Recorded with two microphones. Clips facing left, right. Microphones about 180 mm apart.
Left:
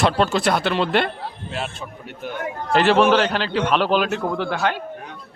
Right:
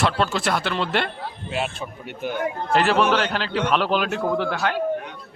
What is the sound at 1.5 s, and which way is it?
Speech, centre (ahead or behind).